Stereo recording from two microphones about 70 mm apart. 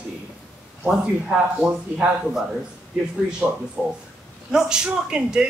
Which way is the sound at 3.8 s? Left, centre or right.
Centre.